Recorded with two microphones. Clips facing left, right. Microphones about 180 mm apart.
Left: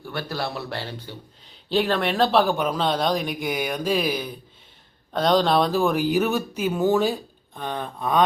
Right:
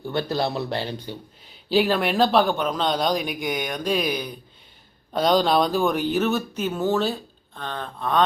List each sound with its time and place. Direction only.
0.0 s speech: 20° right (ahead or behind)
1.7 s speech: 5° right (ahead or behind)